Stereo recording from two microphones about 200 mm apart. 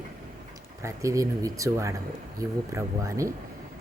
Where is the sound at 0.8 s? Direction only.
15° right (ahead or behind).